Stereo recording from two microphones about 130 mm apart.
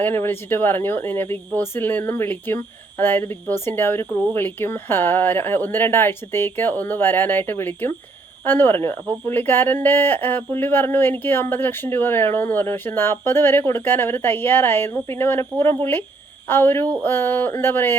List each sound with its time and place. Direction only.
0.0 s speech: 20° left (ahead or behind)